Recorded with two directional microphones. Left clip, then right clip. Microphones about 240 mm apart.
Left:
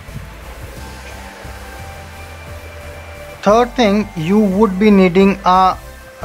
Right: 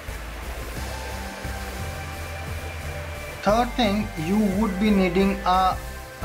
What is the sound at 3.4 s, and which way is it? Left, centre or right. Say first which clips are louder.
Speech: left 9 dB; left.